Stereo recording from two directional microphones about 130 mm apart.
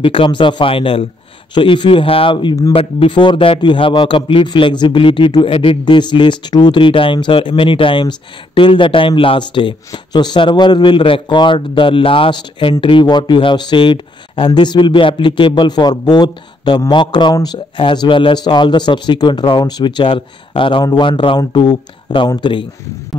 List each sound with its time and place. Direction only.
0.0 s a man's voice: 40° left (ahead or behind)